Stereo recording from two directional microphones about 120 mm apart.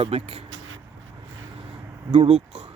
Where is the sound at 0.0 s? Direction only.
55° right (ahead or behind).